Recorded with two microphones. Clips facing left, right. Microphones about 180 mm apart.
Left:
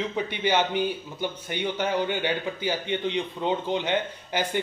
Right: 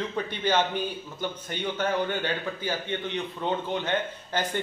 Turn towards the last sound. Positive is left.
turn(degrees=10)  # may be behind; listen again after turning